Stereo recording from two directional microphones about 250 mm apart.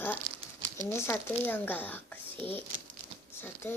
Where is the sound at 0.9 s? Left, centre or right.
Centre.